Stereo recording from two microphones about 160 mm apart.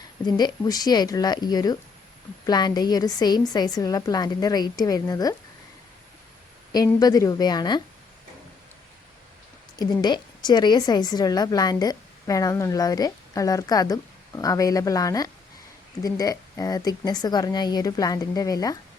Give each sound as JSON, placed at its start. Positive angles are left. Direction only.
{"t": 0.3, "sound": "a woman's voice", "side_deg": 25}
{"t": 6.7, "sound": "a woman's voice", "side_deg": 25}
{"t": 9.7, "sound": "a woman's voice", "side_deg": 25}